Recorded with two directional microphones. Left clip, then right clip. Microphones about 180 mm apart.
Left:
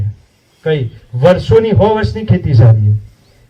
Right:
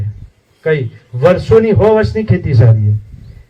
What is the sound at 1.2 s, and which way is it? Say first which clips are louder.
A man's voice: even; 15° right (ahead or behind).